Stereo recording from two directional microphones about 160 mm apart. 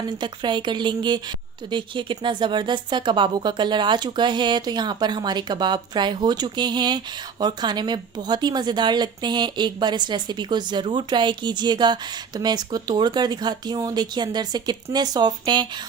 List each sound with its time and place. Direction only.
0.0 s a woman's voice: 30° right (ahead or behind)